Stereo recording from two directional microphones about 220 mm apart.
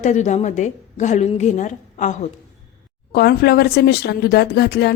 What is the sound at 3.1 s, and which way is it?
Speech, 45° left (ahead or behind).